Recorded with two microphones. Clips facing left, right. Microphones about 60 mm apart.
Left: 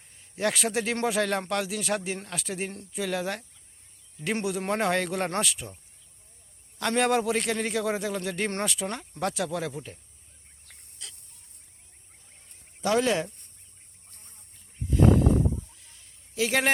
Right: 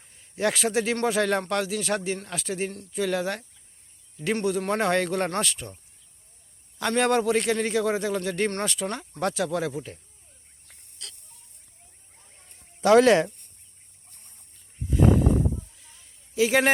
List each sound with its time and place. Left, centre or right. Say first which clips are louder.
0.1 s a man's voice: right 2 dB; centre
4.7 s a man's voice: right 1 dB; centre
12.8 s speech: right 8 dB; right
14.8 s a sound: even; centre